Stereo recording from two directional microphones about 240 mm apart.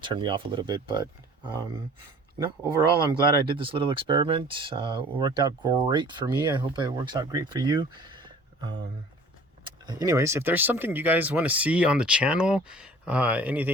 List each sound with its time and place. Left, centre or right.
0.0 s speech: centre
3.1 s speech: right